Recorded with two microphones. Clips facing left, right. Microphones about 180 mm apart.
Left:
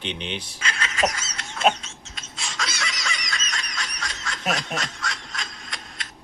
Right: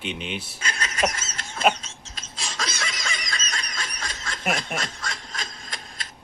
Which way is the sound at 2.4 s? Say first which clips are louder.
Even; 40° right (ahead or behind).